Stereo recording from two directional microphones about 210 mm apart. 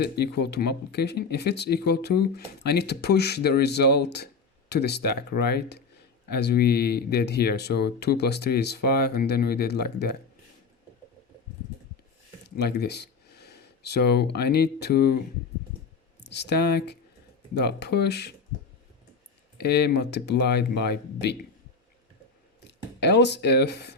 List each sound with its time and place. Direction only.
0.0 s speech: 50° left (ahead or behind)
12.5 s speech: 50° left (ahead or behind)
16.2 s speech: 55° left (ahead or behind)
19.5 s speech: 50° left (ahead or behind)
22.6 s speech: 55° left (ahead or behind)